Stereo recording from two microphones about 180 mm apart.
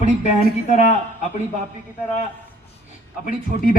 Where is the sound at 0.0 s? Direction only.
40° left (ahead or behind).